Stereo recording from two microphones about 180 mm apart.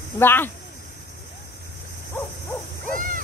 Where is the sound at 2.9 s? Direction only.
50° right (ahead or behind).